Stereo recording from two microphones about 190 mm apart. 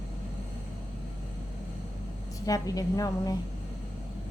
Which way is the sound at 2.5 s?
20° left (ahead or behind).